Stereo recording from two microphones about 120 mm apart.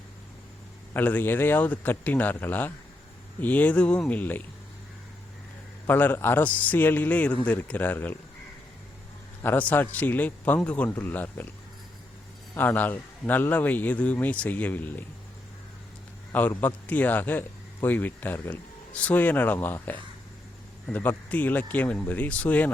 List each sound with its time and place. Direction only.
0.9 s a man's voice: 15° left (ahead or behind)
5.8 s a man's voice: 15° left (ahead or behind)
9.4 s a man's voice: 15° left (ahead or behind)
12.5 s a man's voice: 15° left (ahead or behind)
16.3 s a man's voice: 15° left (ahead or behind)